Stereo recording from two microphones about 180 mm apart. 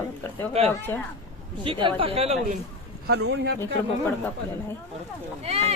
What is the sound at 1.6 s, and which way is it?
Speech, 30° right (ahead or behind).